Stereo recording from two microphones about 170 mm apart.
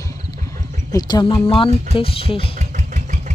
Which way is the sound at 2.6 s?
45° right (ahead or behind).